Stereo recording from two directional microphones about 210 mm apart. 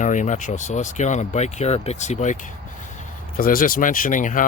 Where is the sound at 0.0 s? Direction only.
35° left (ahead or behind).